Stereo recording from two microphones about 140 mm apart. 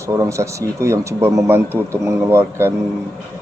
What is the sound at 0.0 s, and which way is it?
A man's voice, 20° right (ahead or behind).